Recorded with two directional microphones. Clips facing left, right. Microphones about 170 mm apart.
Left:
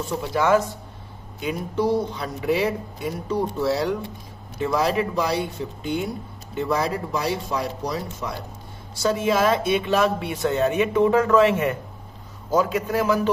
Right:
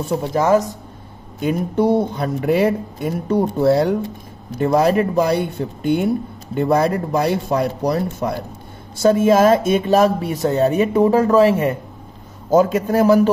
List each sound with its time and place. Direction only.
0.1 s speech: 45° right (ahead or behind)
1.4 s speech: 50° right (ahead or behind); by 11.8 s 35° right (ahead or behind)
12.4 s speech: 45° right (ahead or behind)